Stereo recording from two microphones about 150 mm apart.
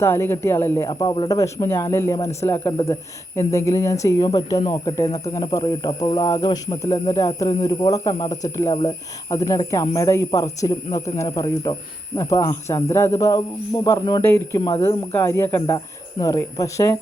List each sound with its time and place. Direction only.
0.0 s speech: 15° left (ahead or behind)
0.9 s speech: 30° left (ahead or behind)
1.4 s speech: 20° left (ahead or behind)